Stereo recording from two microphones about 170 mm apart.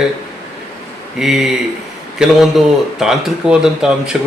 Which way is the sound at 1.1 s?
5° right (ahead or behind).